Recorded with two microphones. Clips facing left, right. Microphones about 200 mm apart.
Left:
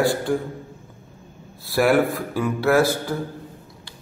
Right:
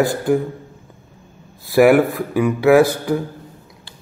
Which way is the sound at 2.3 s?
15° right (ahead or behind).